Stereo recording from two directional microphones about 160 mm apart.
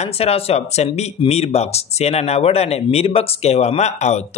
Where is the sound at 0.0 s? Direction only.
40° left (ahead or behind).